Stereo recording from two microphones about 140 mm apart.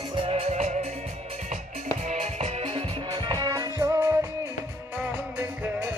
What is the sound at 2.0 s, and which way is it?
Music, 55° right (ahead or behind).